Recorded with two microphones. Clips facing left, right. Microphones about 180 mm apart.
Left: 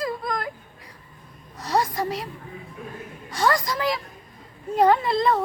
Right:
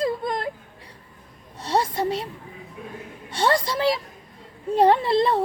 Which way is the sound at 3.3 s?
30° right (ahead or behind).